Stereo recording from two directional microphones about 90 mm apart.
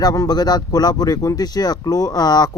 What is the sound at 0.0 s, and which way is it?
Speech, 45° left (ahead or behind).